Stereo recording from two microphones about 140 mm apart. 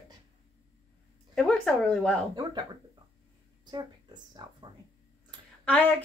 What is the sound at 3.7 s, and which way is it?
Speech, 30° right (ahead or behind).